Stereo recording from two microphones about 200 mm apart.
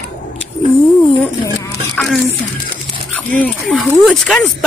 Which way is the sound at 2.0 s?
5° left (ahead or behind).